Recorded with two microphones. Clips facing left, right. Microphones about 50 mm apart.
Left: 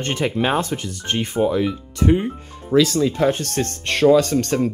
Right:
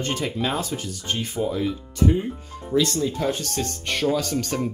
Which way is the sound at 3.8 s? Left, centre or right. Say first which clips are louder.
Left 10 dB; left.